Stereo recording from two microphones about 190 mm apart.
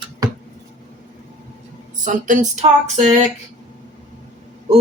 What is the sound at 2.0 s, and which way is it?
Speech, 40° right (ahead or behind).